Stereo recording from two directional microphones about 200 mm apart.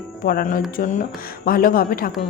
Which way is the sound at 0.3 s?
45° left (ahead or behind).